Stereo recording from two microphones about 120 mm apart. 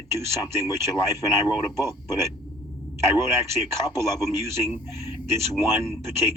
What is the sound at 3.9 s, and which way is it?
Speech, 25° right (ahead or behind).